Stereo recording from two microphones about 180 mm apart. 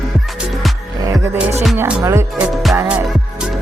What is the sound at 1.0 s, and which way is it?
Music, 20° right (ahead or behind).